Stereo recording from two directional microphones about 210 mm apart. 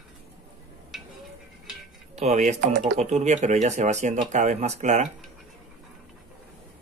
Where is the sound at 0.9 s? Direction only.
Centre (ahead or behind).